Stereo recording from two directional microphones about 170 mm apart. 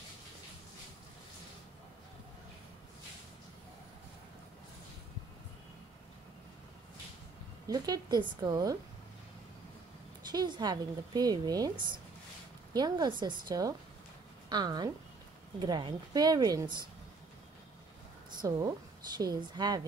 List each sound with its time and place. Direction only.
7.6 s a woman's voice: 25° right (ahead or behind)
10.3 s a woman's voice: 25° right (ahead or behind)
18.4 s a woman's voice: 20° right (ahead or behind)